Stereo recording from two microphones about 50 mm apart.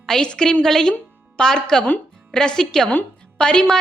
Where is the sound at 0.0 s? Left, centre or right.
Centre.